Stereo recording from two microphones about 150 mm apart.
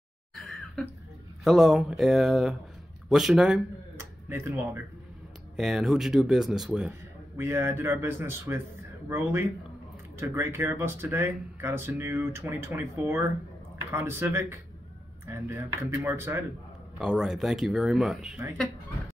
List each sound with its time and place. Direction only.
0.8 s speech: centre (ahead or behind); by 4.8 s 15° right (ahead or behind)
5.6 s speech: 5° right (ahead or behind)
7.3 s speech: 15° right (ahead or behind)
17.0 s speech: 5° right (ahead or behind)